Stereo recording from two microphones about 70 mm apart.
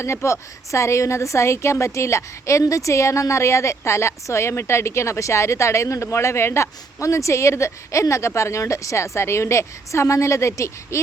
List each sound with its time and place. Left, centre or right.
0.0 s a woman's voice: left